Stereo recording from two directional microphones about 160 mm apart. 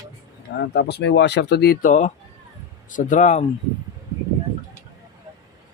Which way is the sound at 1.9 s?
50° left (ahead or behind).